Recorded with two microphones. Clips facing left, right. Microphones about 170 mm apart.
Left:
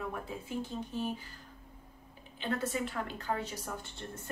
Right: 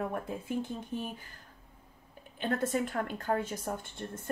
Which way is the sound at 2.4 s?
50° right (ahead or behind).